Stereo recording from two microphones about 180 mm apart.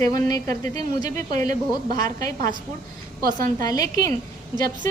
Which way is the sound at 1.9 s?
20° left (ahead or behind).